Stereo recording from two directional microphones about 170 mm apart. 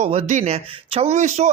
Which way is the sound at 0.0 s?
40° right (ahead or behind).